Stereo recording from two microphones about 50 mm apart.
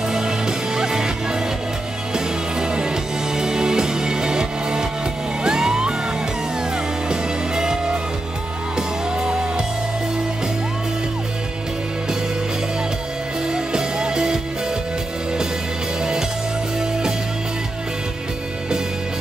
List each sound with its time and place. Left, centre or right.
0.1 s music: centre
2.1 s music: centre
7.1 s music: centre
13.5 s music: centre
16.0 s music: centre